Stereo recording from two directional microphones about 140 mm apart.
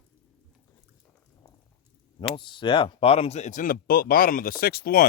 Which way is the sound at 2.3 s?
35° left (ahead or behind).